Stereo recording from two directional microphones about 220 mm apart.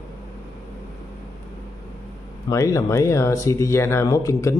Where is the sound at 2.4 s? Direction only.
15° left (ahead or behind).